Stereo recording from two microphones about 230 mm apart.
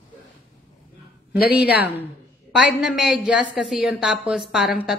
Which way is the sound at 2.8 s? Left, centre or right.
Centre.